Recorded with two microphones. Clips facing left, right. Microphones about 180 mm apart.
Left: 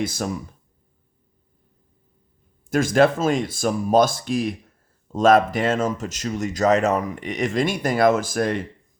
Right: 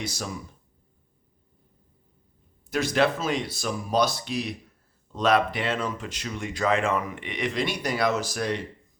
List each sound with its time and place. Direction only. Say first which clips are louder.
0.0 s speech: left 8 dB; 50° left (ahead or behind)
2.6 s speech: left 6 dB; 45° left (ahead or behind)